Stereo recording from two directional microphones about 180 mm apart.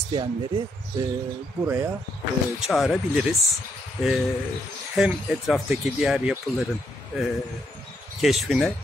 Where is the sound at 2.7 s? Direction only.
Centre (ahead or behind).